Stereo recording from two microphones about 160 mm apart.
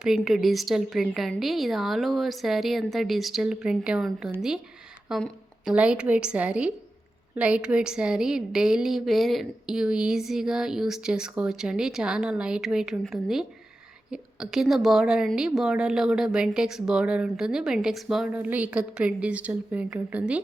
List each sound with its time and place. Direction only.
0.0 s a woman's voice: centre (ahead or behind)